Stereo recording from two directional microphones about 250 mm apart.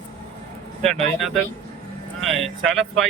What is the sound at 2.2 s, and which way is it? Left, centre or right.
Speech, centre.